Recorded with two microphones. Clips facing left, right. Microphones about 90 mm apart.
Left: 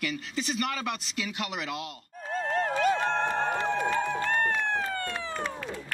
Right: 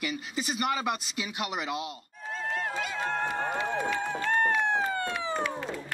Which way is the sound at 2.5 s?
45° left (ahead or behind).